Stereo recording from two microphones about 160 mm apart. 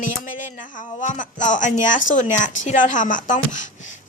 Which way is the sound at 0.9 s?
50° left (ahead or behind).